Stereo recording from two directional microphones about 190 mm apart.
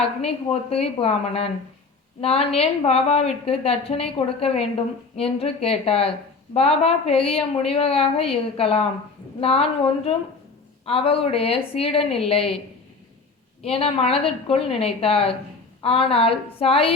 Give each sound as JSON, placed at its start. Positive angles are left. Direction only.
{"t": 0.2, "sound": "a woman's voice", "side_deg": 30}
{"t": 13.6, "sound": "a woman's voice", "side_deg": 30}